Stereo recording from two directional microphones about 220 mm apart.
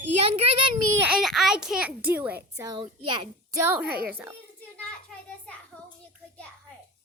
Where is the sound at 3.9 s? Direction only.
45° right (ahead or behind).